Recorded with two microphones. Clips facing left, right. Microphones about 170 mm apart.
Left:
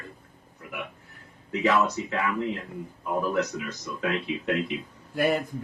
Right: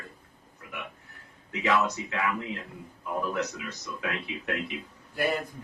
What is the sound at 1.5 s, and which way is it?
Speech, 35° left (ahead or behind).